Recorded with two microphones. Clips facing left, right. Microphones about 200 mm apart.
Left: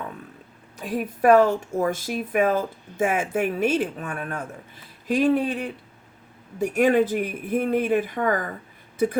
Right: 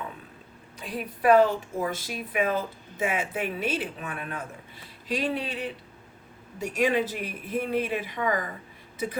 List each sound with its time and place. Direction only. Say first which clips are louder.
0.8 s speech: left 6 dB; 50° left (ahead or behind)